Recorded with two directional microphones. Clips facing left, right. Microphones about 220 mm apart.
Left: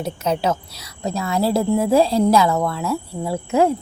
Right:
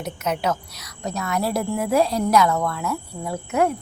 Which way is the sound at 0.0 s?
30° left (ahead or behind).